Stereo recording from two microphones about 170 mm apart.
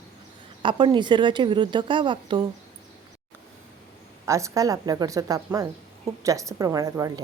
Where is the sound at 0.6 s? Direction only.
30° right (ahead or behind).